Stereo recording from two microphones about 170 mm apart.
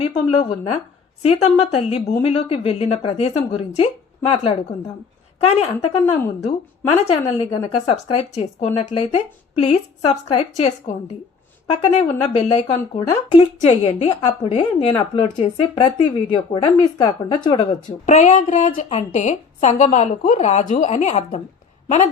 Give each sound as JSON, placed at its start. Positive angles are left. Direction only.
{"t": 0.0, "sound": "a woman's voice", "side_deg": 35}
{"t": 5.4, "sound": "a woman's voice", "side_deg": 35}
{"t": 18.0, "sound": "a woman's voice", "side_deg": 45}